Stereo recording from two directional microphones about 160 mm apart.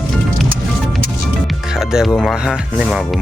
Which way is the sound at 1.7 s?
5° right (ahead or behind).